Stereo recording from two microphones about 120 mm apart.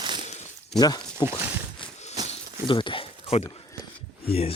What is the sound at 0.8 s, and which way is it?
Speech, 35° left (ahead or behind).